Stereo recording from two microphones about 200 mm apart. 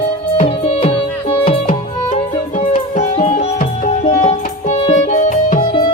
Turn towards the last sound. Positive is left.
turn(degrees=40)  # may be behind; listen again after turning